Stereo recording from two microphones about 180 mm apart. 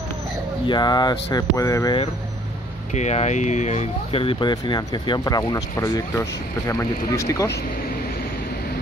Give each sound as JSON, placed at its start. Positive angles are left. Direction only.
{"t": 0.7, "sound": "speech", "side_deg": 25}
{"t": 2.9, "sound": "speech", "side_deg": 40}